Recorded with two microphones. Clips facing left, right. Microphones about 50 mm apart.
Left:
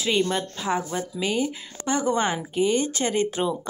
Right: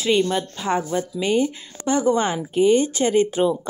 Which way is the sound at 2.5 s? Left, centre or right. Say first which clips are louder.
Right 7 dB; centre.